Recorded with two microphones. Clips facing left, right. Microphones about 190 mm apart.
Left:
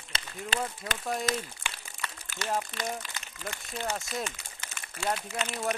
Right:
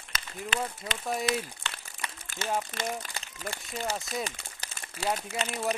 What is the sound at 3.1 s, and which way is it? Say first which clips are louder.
Speech: right 2 dB; 35° right (ahead or behind).